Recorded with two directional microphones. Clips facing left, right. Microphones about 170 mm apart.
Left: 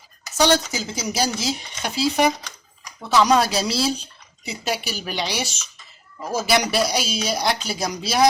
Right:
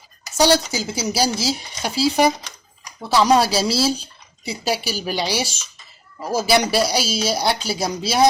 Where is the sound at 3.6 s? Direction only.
5° right (ahead or behind).